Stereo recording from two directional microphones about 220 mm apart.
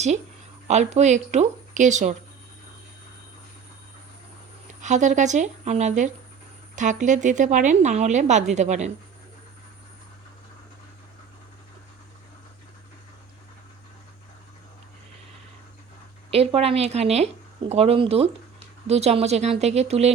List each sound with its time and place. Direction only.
0.7 s speech: 30° right (ahead or behind)
4.8 s speech: 35° right (ahead or behind)
16.3 s speech: 25° right (ahead or behind)